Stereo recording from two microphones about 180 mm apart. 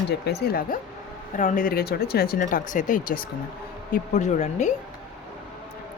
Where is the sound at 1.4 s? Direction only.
45° left (ahead or behind).